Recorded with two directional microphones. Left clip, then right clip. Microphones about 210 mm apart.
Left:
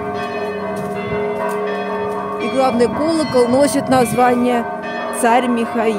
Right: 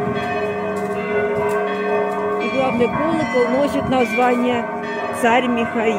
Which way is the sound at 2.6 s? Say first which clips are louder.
Left 5 dB; 35° left (ahead or behind).